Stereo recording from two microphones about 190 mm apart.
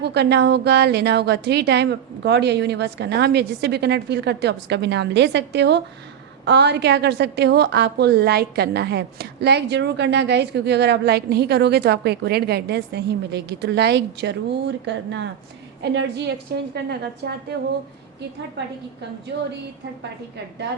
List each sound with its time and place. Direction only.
0.0 s a woman's voice: 60° right (ahead or behind)